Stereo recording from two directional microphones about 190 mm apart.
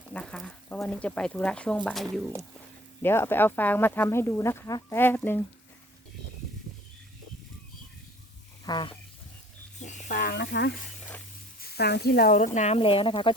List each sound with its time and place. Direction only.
0.1 s speech: 5° left (ahead or behind)
3.0 s speech: 10° left (ahead or behind)
8.6 s a sound: 25° left (ahead or behind)
9.8 s speech: 40° left (ahead or behind)
12.5 s speech: 35° left (ahead or behind)